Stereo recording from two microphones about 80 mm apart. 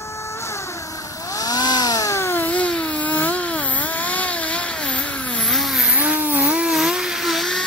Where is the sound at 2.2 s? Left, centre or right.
Left.